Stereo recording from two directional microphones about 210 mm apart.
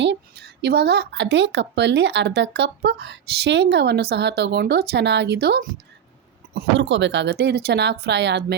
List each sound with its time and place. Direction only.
0.0 s speech: 55° right (ahead or behind)